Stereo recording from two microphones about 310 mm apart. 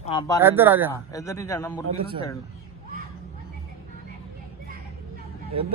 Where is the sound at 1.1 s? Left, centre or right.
Centre.